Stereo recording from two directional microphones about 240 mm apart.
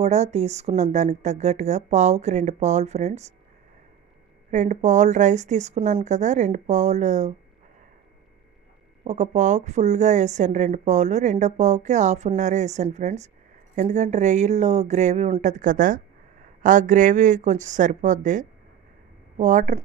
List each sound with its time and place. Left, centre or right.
0.0 s a woman's voice: right
4.5 s a woman's voice: right
9.0 s a woman's voice: right